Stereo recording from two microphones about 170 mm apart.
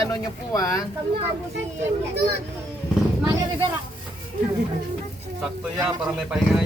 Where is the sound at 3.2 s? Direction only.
20° right (ahead or behind).